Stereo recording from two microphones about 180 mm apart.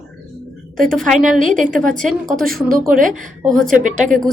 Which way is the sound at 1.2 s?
45° right (ahead or behind).